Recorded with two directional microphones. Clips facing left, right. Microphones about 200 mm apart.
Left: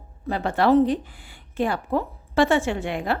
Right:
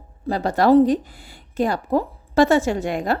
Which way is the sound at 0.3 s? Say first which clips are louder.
Right 3 dB; 40° right (ahead or behind).